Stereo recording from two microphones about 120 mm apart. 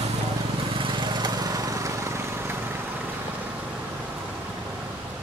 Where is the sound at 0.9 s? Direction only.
40° right (ahead or behind).